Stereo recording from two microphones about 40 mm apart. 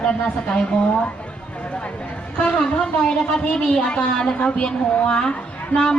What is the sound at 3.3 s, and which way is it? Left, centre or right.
Speech, centre.